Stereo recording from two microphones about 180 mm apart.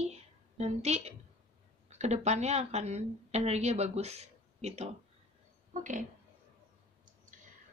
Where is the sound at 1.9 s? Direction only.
40° right (ahead or behind).